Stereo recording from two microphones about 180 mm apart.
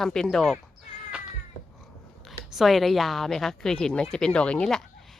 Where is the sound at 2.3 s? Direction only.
Centre (ahead or behind).